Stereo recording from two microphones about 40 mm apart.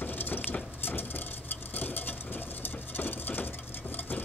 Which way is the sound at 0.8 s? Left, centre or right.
Left.